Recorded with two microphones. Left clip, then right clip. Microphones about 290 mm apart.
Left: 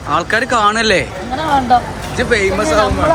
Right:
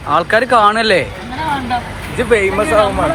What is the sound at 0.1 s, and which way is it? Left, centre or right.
Speech, centre.